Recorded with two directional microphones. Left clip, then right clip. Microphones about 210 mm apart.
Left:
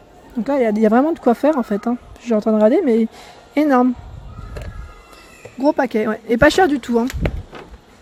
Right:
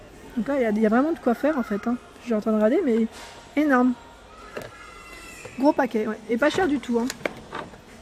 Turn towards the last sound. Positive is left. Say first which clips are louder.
# left 6 dB
turn(degrees=20)  # may be behind; listen again after turning